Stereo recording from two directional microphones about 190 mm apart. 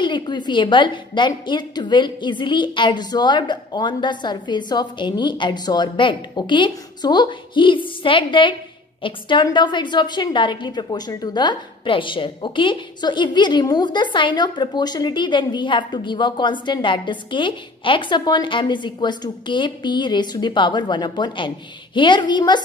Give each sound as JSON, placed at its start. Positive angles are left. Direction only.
{"t": 0.0, "sound": "a woman's voice", "side_deg": 25}